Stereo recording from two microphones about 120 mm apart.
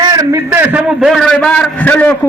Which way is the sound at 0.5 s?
15° right (ahead or behind).